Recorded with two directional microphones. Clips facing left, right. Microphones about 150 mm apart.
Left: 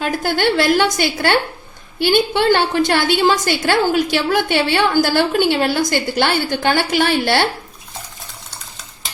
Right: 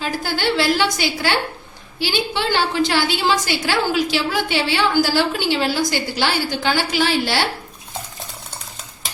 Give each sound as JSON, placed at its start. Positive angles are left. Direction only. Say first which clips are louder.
{"t": 0.0, "sound": "a woman's voice", "louder": "left 4 dB", "side_deg": 55}